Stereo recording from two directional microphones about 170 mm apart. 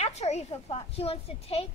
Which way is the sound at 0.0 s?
40° left (ahead or behind).